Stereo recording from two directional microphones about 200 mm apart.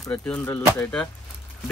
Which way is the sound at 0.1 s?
10° left (ahead or behind).